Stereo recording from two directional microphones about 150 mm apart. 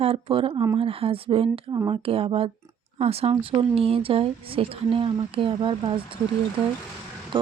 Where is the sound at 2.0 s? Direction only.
40° right (ahead or behind).